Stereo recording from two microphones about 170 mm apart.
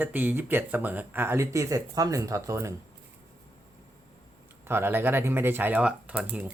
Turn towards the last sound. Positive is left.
turn(degrees=-10)  # may be behind; listen again after turning